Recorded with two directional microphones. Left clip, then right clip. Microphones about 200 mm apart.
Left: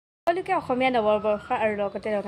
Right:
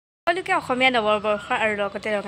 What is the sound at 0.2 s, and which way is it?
A woman's voice, centre (ahead or behind).